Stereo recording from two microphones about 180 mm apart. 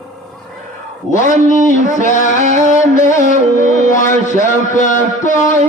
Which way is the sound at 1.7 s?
40° right (ahead or behind).